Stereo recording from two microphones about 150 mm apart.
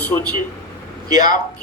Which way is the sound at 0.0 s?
10° left (ahead or behind).